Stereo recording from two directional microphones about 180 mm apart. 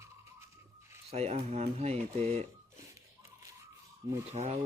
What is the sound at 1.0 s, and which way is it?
Speech, 35° right (ahead or behind).